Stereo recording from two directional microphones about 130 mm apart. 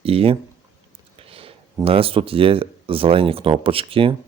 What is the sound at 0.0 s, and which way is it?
A man's voice, 45° right (ahead or behind).